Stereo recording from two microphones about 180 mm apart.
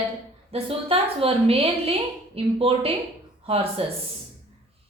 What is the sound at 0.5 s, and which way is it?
A woman's voice, 35° right (ahead or behind).